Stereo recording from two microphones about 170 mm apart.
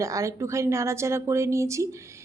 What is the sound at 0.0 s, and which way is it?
A woman's voice, 20° right (ahead or behind).